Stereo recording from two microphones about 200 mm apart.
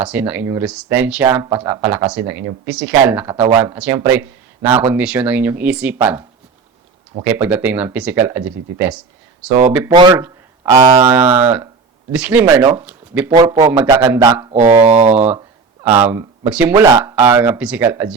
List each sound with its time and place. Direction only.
0.0 s speech: 5° right (ahead or behind)
7.3 s speech: 10° right (ahead or behind)
9.9 s speech: 20° right (ahead or behind)
12.1 s speech: 5° right (ahead or behind)